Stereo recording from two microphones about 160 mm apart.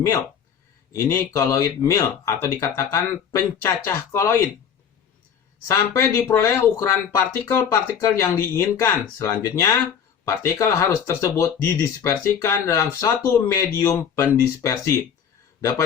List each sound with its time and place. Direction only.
0.0 s speech: 15° left (ahead or behind)
5.6 s speech: 15° left (ahead or behind)